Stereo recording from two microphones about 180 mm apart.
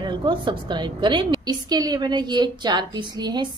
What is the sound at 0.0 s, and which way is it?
A woman's voice, 25° right (ahead or behind).